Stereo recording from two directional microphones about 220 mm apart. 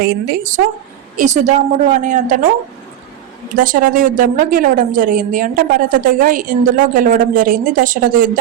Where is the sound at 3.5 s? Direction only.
35° right (ahead or behind).